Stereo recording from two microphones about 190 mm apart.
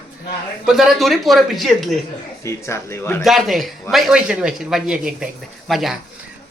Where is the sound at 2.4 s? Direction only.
15° left (ahead or behind).